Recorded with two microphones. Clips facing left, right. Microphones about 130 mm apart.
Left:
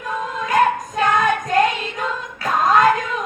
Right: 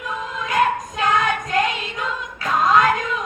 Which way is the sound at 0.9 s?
45° left (ahead or behind).